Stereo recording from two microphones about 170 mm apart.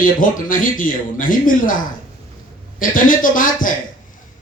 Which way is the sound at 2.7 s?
55° left (ahead or behind).